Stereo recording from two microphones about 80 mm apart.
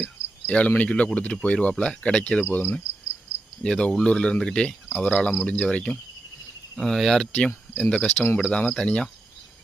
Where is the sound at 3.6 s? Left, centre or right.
Centre.